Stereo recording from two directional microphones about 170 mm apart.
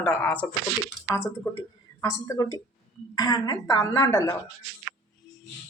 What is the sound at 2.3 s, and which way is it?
A woman's voice, 20° left (ahead or behind).